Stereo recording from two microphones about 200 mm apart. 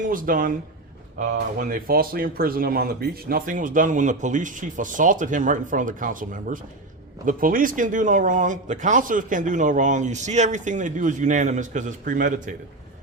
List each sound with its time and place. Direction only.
0.0 s speech: 45° right (ahead or behind)